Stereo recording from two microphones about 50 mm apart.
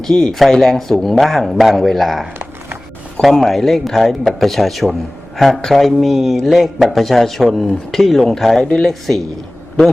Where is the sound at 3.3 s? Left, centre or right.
Centre.